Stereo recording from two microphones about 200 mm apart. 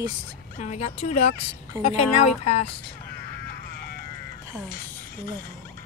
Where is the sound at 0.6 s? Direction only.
35° left (ahead or behind).